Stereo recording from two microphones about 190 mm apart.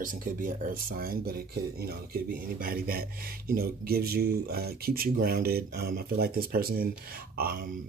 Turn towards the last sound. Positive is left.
turn(degrees=-50)  # may be behind; listen again after turning